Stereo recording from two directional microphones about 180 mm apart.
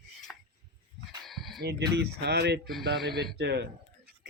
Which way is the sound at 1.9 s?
65° right (ahead or behind).